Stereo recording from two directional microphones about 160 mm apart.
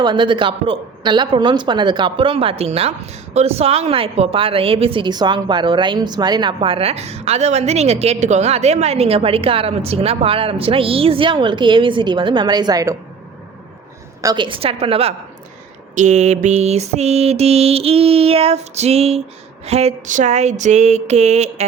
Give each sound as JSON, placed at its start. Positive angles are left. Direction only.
{"t": 0.0, "sound": "speech", "side_deg": -30}
{"t": 14.2, "sound": "speech", "side_deg": -25}
{"t": 19.6, "sound": "a sound", "side_deg": -40}